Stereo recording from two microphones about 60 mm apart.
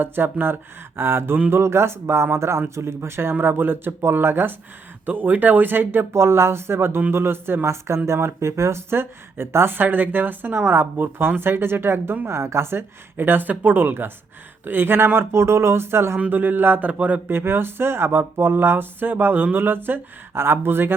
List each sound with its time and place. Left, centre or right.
0.0 s speech: right
13.1 s speech: right
16.3 s speech: right
17.2 s speech: right